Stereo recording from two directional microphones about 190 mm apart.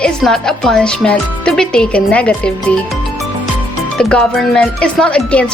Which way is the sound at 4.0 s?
5° left (ahead or behind).